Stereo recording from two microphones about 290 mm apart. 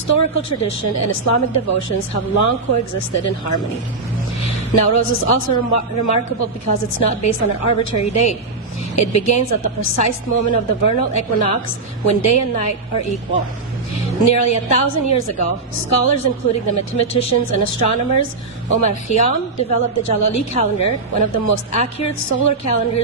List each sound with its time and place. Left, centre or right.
0.1 s a woman's voice: left